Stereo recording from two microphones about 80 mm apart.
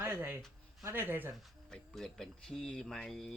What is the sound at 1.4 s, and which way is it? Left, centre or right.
Speech, centre.